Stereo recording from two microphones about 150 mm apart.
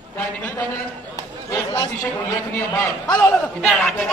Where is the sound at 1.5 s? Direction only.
25° left (ahead or behind).